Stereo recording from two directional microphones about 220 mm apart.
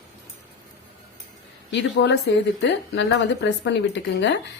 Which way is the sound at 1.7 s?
50° left (ahead or behind).